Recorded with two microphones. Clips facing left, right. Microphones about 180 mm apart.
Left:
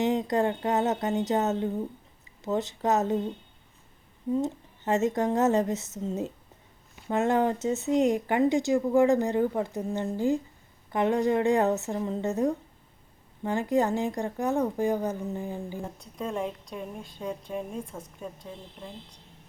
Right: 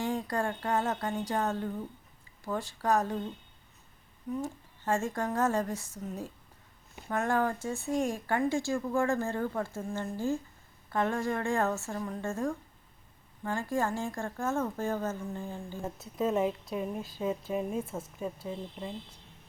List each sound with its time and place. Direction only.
0.0 s speech: 20° left (ahead or behind)
16.0 s a woman's voice: 5° right (ahead or behind)